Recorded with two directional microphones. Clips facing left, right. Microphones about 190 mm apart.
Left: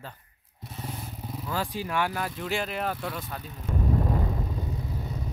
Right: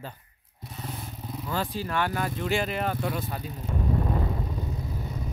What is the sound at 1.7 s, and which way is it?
Speech, 15° left (ahead or behind).